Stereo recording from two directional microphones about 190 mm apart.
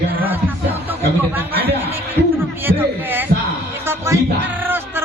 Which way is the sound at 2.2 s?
55° right (ahead or behind).